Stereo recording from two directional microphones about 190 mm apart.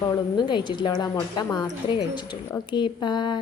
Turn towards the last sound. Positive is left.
turn(degrees=25)  # may be behind; listen again after turning